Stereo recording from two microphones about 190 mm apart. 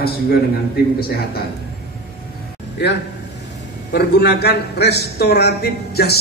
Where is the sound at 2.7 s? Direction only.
60° left (ahead or behind).